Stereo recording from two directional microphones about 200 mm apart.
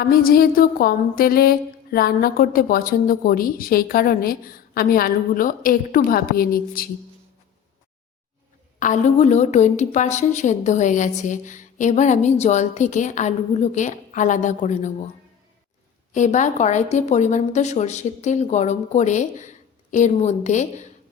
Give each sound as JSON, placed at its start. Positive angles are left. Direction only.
{"t": 0.0, "sound": "a sound", "side_deg": 45}
{"t": 8.8, "sound": "a woman's voice", "side_deg": 35}
{"t": 16.1, "sound": "a woman's voice", "side_deg": 40}